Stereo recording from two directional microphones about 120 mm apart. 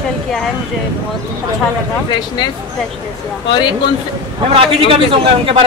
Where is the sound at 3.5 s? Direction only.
35° left (ahead or behind).